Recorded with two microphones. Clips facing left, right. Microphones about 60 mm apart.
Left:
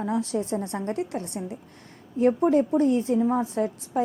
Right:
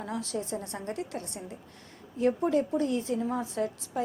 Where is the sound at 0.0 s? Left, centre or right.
Left.